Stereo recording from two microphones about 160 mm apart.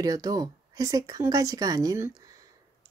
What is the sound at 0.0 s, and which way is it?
Speech, 25° right (ahead or behind).